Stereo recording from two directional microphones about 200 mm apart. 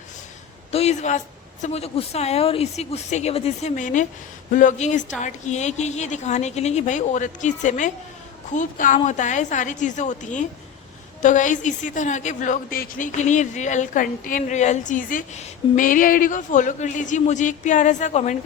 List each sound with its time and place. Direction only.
0.7 s a woman's voice: 30° left (ahead or behind)